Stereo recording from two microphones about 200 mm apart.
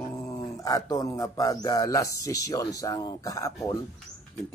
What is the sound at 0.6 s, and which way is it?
A man's voice, 15° left (ahead or behind).